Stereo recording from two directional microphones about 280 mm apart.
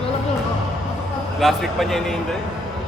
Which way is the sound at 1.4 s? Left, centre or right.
Centre.